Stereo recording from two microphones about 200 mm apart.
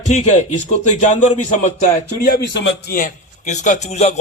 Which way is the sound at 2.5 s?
65° left (ahead or behind).